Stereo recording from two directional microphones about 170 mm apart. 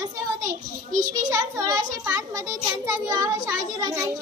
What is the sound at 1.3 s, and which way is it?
A child's voice, 20° right (ahead or behind).